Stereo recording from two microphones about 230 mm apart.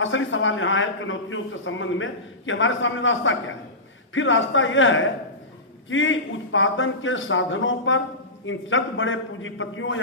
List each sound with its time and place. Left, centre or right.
0.0 s a man's voice: left